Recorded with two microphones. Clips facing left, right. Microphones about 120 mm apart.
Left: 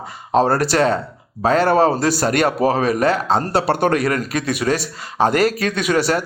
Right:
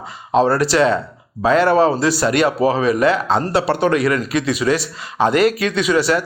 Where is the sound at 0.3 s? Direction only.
45° left (ahead or behind).